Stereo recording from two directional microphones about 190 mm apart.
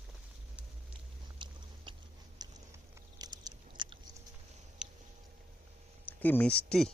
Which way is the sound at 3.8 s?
25° right (ahead or behind).